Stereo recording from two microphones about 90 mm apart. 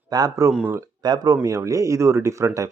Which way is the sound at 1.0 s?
50° right (ahead or behind).